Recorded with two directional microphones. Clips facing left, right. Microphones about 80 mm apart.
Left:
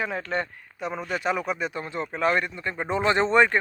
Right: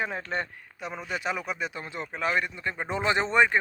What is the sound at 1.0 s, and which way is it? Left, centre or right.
Speech, centre.